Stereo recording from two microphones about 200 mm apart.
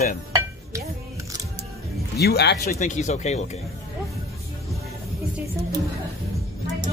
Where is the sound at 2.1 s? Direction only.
55° left (ahead or behind).